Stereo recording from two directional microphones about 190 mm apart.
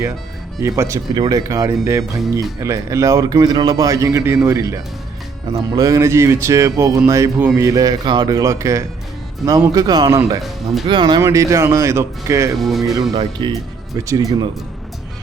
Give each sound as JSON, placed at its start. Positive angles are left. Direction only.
{"t": 0.6, "sound": "speech", "side_deg": -15}
{"t": 12.5, "sound": "speech", "side_deg": 0}
{"t": 13.1, "sound": "speech", "side_deg": -25}